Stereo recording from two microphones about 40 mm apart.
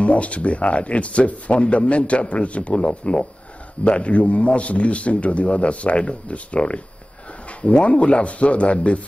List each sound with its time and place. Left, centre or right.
0.0 s a man's voice: left